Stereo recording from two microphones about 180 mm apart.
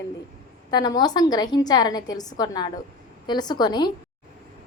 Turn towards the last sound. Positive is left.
turn(degrees=25)  # may be behind; listen again after turning